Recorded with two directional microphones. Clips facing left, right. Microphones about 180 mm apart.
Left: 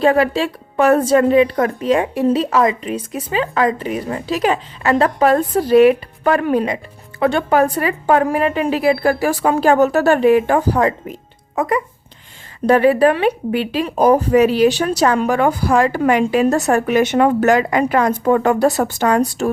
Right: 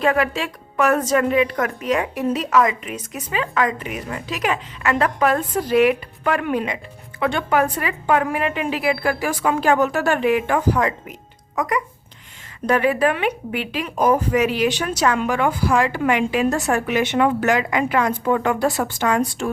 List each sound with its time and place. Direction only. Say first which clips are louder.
0.0 s speech: left 5 dB; 30° left (ahead or behind)